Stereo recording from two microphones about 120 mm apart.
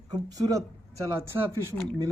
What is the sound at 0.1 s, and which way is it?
Speech, 30° right (ahead or behind).